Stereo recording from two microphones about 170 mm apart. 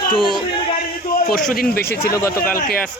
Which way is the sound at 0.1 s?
5° left (ahead or behind).